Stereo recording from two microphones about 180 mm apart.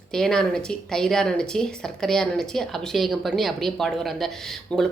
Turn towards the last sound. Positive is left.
turn(degrees=5)  # may be behind; listen again after turning